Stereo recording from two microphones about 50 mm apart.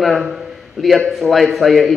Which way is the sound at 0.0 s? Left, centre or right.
Centre.